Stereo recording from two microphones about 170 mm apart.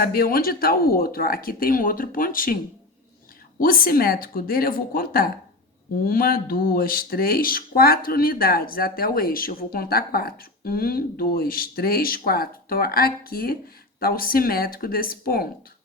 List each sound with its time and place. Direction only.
0.0 s speech: 60° left (ahead or behind)
3.6 s speech: 60° left (ahead or behind)